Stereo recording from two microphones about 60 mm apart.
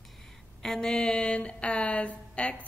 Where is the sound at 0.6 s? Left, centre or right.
Centre.